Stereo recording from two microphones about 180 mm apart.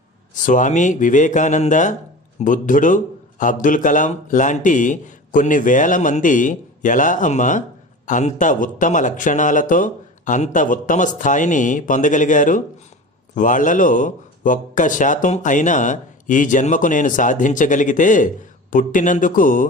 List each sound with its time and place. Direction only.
0.4 s a man's voice: 45° left (ahead or behind)